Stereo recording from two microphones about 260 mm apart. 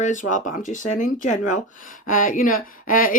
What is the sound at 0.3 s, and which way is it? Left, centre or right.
A woman's voice, left.